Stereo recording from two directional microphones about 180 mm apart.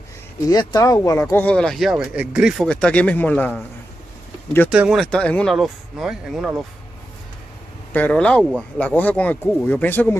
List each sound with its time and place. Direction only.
0.5 s speech: 20° left (ahead or behind)
4.6 s speech: 5° right (ahead or behind)
7.9 s speech: 5° left (ahead or behind)